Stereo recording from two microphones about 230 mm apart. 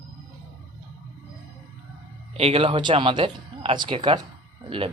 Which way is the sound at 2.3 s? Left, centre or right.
Right.